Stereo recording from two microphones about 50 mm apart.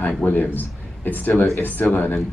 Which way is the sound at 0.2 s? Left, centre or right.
Left.